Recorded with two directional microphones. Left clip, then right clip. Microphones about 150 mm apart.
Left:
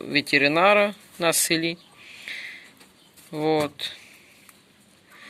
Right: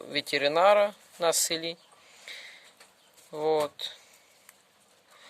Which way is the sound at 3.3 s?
30° right (ahead or behind).